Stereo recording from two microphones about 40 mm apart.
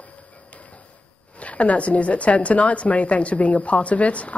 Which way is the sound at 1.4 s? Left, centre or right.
Left.